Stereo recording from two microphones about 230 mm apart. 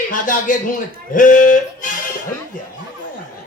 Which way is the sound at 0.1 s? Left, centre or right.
Left.